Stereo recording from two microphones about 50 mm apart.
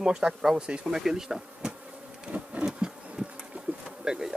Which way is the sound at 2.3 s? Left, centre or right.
Right.